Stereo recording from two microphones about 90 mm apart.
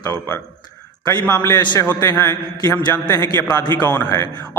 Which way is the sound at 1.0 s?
25° left (ahead or behind).